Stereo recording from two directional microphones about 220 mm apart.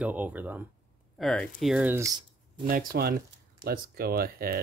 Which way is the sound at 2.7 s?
40° right (ahead or behind).